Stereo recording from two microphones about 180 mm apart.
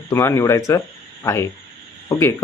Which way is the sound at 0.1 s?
15° left (ahead or behind).